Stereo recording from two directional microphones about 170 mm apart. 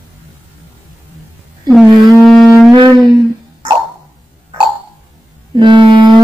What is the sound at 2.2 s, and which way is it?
Wind instrument, centre (ahead or behind).